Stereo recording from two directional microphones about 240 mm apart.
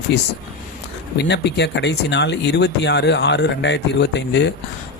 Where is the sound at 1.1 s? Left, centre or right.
Left.